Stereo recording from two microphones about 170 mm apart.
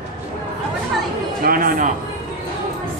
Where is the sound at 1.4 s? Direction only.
55° right (ahead or behind).